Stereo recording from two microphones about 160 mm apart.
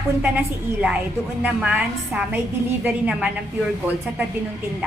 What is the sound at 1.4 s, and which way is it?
A woman's voice, 10° right (ahead or behind).